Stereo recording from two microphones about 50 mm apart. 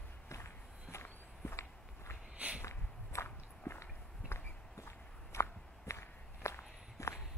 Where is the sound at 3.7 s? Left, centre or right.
Left.